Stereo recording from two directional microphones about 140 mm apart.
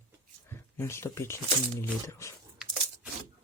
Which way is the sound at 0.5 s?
20° left (ahead or behind).